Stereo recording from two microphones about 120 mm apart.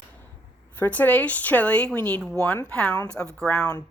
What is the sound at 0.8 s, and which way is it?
Speech, 15° left (ahead or behind).